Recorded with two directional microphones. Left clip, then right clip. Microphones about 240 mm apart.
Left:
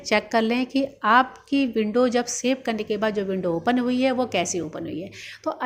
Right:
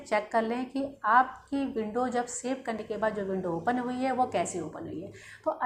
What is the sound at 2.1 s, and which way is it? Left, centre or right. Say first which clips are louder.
A woman's voice: left 8 dB; left.